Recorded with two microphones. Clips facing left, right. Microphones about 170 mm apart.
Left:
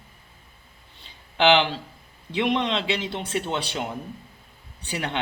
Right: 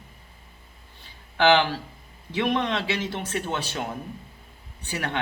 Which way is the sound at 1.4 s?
20° left (ahead or behind).